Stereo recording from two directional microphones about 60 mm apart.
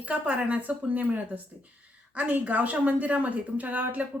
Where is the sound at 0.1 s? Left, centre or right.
Centre.